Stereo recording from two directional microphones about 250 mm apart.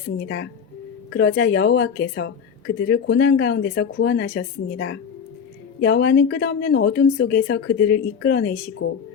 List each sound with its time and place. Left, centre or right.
1.1 s a woman's voice: left